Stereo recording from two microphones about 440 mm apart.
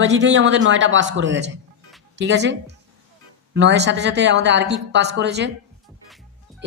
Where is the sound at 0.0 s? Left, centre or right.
Right.